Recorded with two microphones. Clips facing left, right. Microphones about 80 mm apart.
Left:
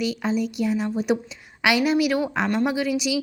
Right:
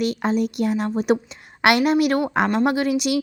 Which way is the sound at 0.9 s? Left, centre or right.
Right.